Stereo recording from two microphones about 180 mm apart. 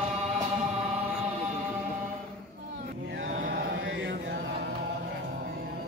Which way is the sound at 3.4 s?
70° right (ahead or behind).